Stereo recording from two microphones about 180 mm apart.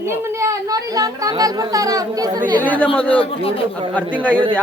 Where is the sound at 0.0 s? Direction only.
15° right (ahead or behind).